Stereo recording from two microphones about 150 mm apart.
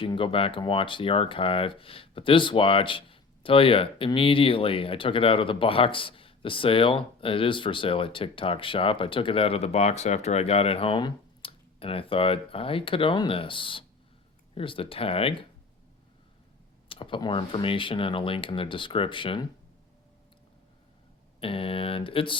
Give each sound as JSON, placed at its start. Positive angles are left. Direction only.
{"t": 0.0, "sound": "speech", "side_deg": 35}
{"t": 16.9, "sound": "speech", "side_deg": 35}
{"t": 21.4, "sound": "speech", "side_deg": 40}